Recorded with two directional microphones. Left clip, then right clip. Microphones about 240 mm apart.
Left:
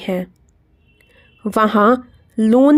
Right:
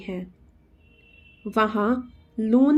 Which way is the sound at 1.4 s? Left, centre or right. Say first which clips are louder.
Left 9 dB; left.